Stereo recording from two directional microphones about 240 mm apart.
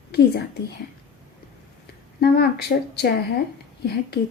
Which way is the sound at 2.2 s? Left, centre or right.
Left.